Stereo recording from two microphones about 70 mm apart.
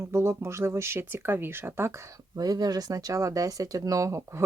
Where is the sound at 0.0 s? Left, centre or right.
Right.